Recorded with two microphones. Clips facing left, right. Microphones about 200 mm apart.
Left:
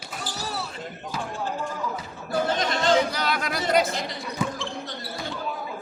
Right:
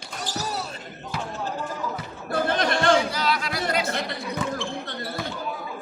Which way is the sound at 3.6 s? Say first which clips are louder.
Left 3 dB; 60° right (ahead or behind).